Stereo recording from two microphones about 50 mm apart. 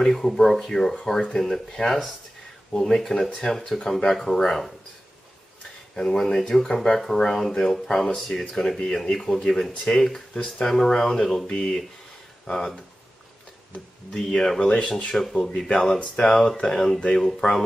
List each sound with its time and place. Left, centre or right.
0.0 s speech: centre
5.9 s speech: centre
14.6 s speech: left